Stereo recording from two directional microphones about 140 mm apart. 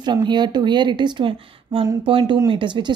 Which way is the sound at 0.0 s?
30° right (ahead or behind).